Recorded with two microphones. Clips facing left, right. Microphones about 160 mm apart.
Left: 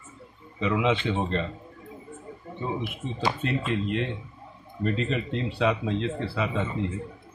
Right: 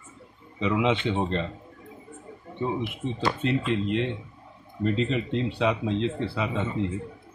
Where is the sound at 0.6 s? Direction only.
20° right (ahead or behind).